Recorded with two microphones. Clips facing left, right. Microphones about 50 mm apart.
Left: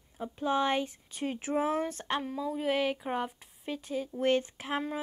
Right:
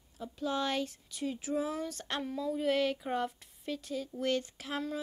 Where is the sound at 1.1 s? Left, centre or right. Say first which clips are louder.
Left 2 dB; left.